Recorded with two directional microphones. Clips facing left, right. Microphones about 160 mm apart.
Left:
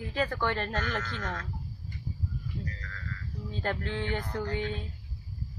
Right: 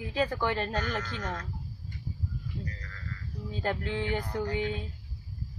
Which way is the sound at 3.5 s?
15° right (ahead or behind).